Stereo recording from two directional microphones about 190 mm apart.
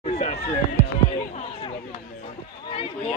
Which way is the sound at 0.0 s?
35° left (ahead or behind).